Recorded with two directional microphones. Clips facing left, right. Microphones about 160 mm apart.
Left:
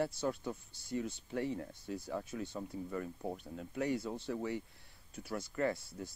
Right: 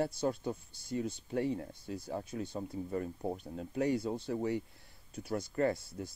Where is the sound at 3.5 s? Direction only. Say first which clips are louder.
Right 4 dB; 35° right (ahead or behind).